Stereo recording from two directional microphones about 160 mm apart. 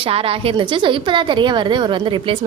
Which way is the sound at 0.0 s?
35° right (ahead or behind).